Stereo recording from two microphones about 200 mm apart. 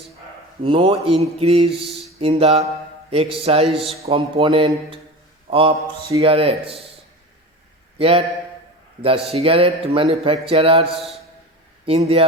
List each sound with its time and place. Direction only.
0.6 s a man's voice: 25° right (ahead or behind)
1.8 s a sound: centre (ahead or behind)
2.1 s a man's voice: 30° right (ahead or behind)
7.9 s a man's voice: 30° right (ahead or behind)
10.9 s a man's voice: centre (ahead or behind)
11.9 s a man's voice: 30° right (ahead or behind)